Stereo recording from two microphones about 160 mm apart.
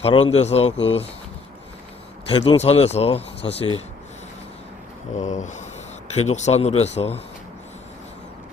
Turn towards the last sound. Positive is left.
turn(degrees=40)  # may be behind; listen again after turning